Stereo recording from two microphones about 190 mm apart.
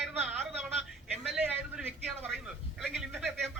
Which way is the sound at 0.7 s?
35° right (ahead or behind).